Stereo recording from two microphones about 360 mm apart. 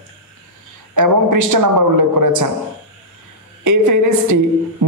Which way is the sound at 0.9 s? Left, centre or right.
Right.